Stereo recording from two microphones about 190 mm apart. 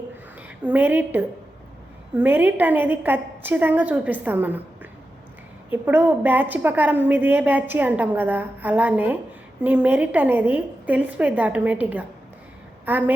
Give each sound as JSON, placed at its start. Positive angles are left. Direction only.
{"t": 0.6, "sound": "a woman's voice", "side_deg": -10}